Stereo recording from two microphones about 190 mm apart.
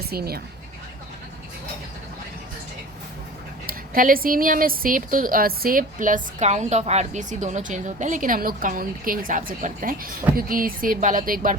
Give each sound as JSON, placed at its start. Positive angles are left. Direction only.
{"t": 0.1, "sound": "a woman's voice", "side_deg": -55}
{"t": 3.7, "sound": "a woman's voice", "side_deg": -50}